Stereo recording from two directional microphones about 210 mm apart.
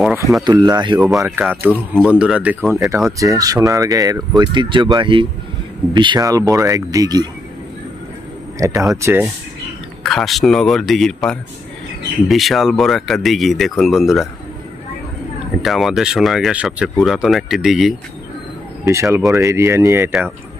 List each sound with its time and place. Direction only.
0.4 s speech: 20° right (ahead or behind)
1.4 s speech: 10° right (ahead or behind)
3.1 s speech: 15° right (ahead or behind)
8.5 s speech: 15° right (ahead or behind)
10.0 s speech: centre (ahead or behind)
15.6 s speech: centre (ahead or behind)
18.9 s speech: 15° right (ahead or behind)